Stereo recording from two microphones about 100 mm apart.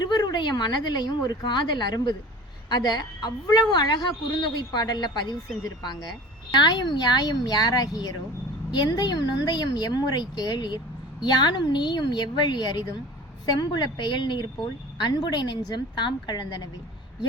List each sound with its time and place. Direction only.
0.0 s a woman's voice: 40° left (ahead or behind)